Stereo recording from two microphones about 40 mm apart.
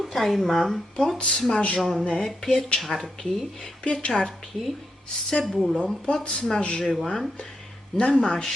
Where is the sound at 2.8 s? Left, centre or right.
Centre.